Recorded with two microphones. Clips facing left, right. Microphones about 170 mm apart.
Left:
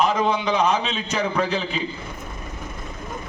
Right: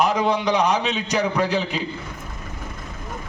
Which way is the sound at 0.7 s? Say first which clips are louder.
Right 2 dB; 70° right (ahead or behind).